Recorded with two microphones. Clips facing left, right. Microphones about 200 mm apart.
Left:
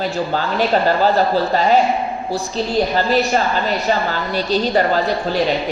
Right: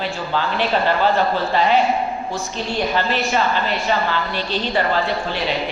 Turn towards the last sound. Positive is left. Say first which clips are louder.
# left 5 dB
turn(degrees=40)  # may be behind; listen again after turning